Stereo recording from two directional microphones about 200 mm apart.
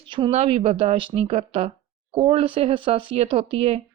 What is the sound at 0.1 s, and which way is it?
Speech, 30° right (ahead or behind).